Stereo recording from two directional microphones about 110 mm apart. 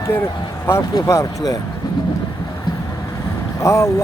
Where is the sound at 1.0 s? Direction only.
30° left (ahead or behind).